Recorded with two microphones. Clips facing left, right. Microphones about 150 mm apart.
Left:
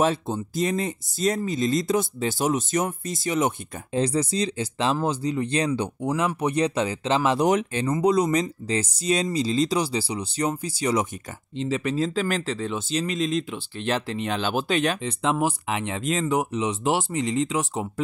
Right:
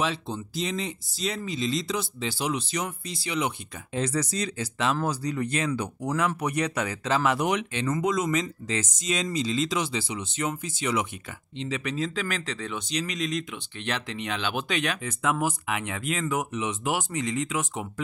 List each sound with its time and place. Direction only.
0.0 s speech: 45° left (ahead or behind)
4.0 s speech: 30° left (ahead or behind)
7.5 s speech: 40° left (ahead or behind)